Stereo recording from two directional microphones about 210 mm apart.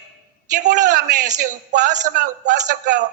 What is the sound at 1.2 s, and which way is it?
A man's voice, 35° right (ahead or behind).